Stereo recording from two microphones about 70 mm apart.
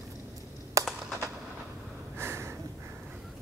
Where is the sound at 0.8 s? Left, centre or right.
Right.